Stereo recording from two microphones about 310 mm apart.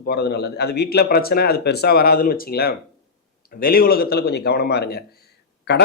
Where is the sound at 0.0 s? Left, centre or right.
Left.